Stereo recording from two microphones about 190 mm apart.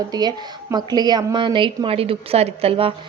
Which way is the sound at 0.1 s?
20° right (ahead or behind).